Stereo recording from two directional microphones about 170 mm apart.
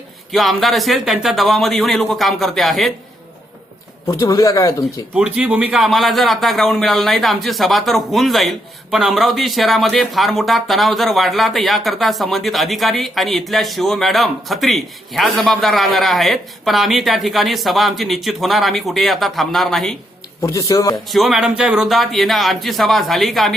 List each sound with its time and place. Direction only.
0.3 s speech: centre (ahead or behind)
4.0 s a man's voice: 20° left (ahead or behind)
5.1 s speech: 5° right (ahead or behind)
20.4 s a man's voice: 20° left (ahead or behind)
21.1 s speech: centre (ahead or behind)